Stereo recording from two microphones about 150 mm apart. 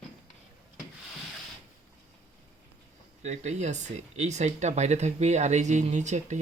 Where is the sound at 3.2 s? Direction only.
50° right (ahead or behind).